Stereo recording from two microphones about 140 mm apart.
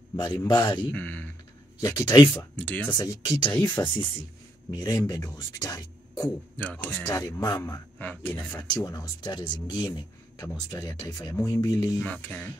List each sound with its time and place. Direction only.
0.1 s a man's voice: 30° left (ahead or behind)
0.9 s speech: 10° left (ahead or behind)
1.8 s speech: 25° left (ahead or behind)
2.5 s speech: 10° left (ahead or behind)
2.9 s speech: 30° left (ahead or behind)
3.8 s speech: 20° left (ahead or behind)
6.5 s speech: 10° left (ahead or behind)
8.0 s speech: 15° left (ahead or behind)
8.5 s speech: 25° left (ahead or behind)
12.0 s speech: 10° left (ahead or behind)